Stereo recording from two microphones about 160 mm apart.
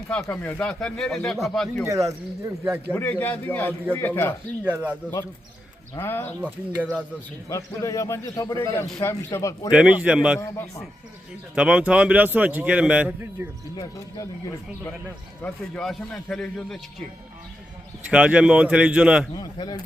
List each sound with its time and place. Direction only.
0.1 s speech: 10° left (ahead or behind)
1.9 s speech: 20° right (ahead or behind)
2.9 s a man's voice: 10° left (ahead or behind)
4.6 s a man's voice: 10° right (ahead or behind)
6.0 s a man's voice: 15° left (ahead or behind)
6.4 s a man's voice: 10° right (ahead or behind)
7.5 s a man's voice: 20° left (ahead or behind)
9.6 s a man's voice: 5° right (ahead or behind)
11.5 s a man's voice: 5° right (ahead or behind)
13.7 s a man's voice: 20° left (ahead or behind)
15.4 s speech: 5° left (ahead or behind)
18.0 s a man's voice: 5° right (ahead or behind)
19.4 s a man's voice: 25° left (ahead or behind)